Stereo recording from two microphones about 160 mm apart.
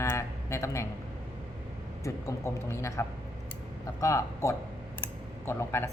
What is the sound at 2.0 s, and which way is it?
A woman's voice, 20° left (ahead or behind).